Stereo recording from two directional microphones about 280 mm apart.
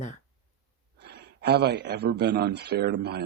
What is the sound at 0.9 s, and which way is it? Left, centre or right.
A man's voice, right.